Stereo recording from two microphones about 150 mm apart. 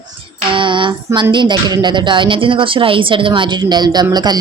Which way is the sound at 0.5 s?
35° right (ahead or behind).